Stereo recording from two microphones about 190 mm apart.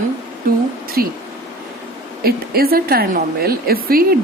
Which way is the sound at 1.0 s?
50° right (ahead or behind).